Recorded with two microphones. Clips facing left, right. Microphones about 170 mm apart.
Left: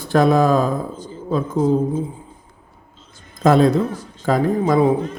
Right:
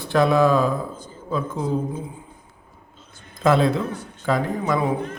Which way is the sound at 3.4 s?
40° left (ahead or behind).